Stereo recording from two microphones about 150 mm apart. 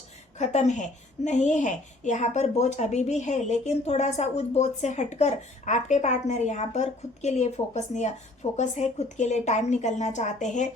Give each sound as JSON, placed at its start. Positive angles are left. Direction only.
{"t": 0.3, "sound": "a woman's voice", "side_deg": 50}